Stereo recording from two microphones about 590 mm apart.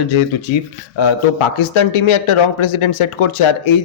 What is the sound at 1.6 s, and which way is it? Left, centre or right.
Speech, left.